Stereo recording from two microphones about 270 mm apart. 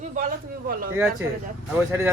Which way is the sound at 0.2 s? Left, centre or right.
Right.